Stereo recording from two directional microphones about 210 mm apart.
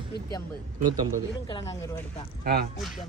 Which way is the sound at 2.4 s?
45° right (ahead or behind).